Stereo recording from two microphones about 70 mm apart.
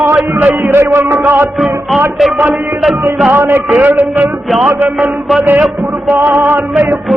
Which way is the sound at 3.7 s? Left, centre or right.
Right.